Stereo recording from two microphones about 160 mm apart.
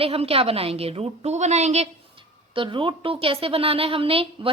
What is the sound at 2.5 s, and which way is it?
A woman's voice, 30° right (ahead or behind).